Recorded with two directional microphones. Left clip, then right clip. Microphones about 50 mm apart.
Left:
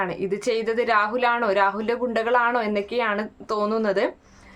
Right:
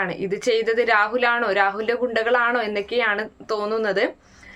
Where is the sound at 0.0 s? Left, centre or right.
Left.